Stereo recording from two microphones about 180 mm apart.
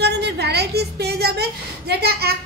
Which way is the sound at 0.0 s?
65° right (ahead or behind).